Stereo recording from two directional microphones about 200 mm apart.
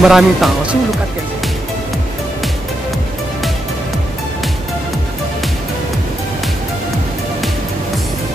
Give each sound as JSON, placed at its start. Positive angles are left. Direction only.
{"t": 0.0, "sound": "speech", "side_deg": 0}